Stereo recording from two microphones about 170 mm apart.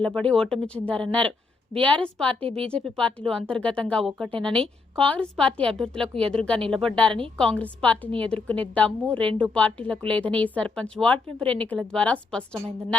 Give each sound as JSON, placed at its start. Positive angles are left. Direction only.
{"t": 0.0, "sound": "a woman's voice", "side_deg": 5}
{"t": 2.4, "sound": "speech", "side_deg": -35}
{"t": 2.6, "sound": "a woman's voice", "side_deg": 5}